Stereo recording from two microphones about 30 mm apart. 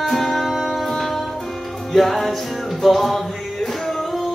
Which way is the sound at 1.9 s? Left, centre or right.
Centre.